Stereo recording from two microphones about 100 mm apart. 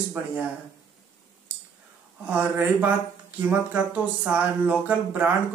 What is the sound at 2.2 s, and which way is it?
Speech, 15° right (ahead or behind).